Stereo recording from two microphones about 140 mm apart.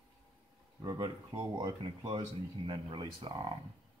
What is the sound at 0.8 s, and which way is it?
Speech, 25° right (ahead or behind).